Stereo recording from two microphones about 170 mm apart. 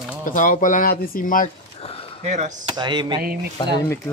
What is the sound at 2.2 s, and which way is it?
Speech, 45° right (ahead or behind).